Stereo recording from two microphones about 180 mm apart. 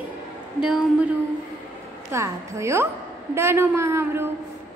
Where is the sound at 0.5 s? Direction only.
5° right (ahead or behind).